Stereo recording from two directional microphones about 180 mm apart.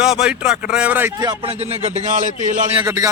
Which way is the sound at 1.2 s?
25° right (ahead or behind).